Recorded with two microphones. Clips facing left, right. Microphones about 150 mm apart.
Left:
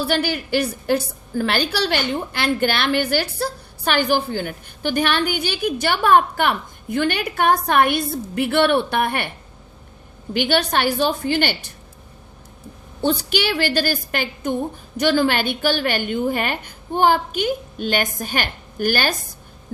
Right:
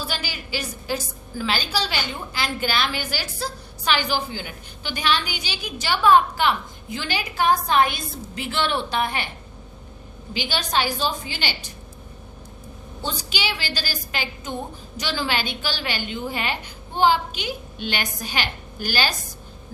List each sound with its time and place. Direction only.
0.0 s a woman's voice: 60° left (ahead or behind)
10.3 s a woman's voice: 60° left (ahead or behind)
13.0 s a woman's voice: 60° left (ahead or behind)